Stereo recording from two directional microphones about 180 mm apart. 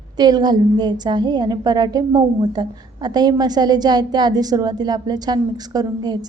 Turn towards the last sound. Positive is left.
turn(degrees=-20)  # may be behind; listen again after turning